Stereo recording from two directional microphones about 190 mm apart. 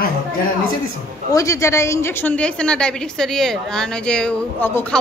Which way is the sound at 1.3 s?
15° left (ahead or behind).